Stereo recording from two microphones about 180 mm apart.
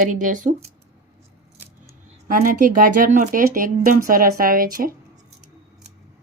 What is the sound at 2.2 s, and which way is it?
Speech, 50° right (ahead or behind).